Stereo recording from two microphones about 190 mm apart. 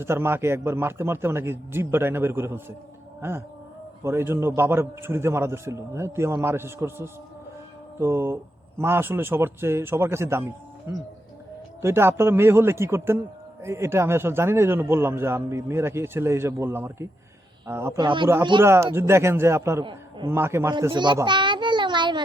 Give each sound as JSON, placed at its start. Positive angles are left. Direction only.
{"t": 0.0, "sound": "a man's voice", "side_deg": -10}
{"t": 18.6, "sound": "a man's voice", "side_deg": -15}
{"t": 19.8, "sound": "a man's voice", "side_deg": -25}
{"t": 20.3, "sound": "a child's voice", "side_deg": -15}